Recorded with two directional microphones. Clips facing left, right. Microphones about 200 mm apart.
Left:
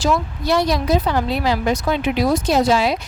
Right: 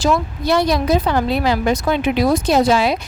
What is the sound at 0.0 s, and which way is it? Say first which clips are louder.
A woman's voice: right 2 dB; 55° right (ahead or behind).